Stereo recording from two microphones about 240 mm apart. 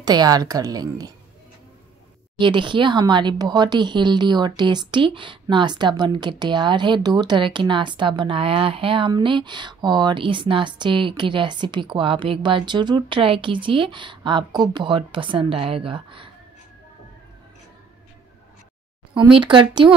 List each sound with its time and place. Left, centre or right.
0.0 s a woman's voice: centre
2.3 s speech: centre
19.3 s speech: centre